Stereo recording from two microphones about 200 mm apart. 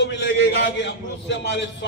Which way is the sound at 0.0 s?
65° left (ahead or behind).